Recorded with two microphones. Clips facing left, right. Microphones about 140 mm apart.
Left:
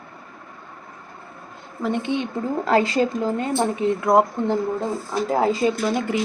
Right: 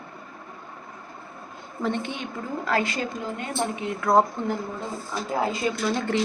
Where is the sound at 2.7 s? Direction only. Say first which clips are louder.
Left 7 dB; 30° left (ahead or behind).